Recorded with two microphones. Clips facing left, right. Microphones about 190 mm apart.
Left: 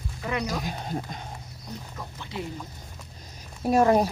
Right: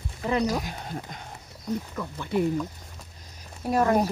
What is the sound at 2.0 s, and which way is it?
Speech, 60° right (ahead or behind).